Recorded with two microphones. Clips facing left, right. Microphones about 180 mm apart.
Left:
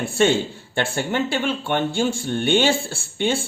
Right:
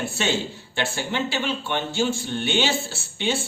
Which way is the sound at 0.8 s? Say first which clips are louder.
Left 4 dB; 50° left (ahead or behind).